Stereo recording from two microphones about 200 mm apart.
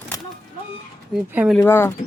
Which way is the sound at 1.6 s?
10° left (ahead or behind).